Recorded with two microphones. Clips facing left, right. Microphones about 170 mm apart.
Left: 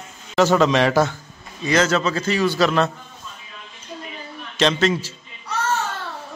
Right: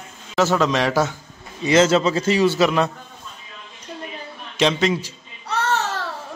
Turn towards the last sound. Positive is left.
turn(degrees=-65)  # may be behind; listen again after turning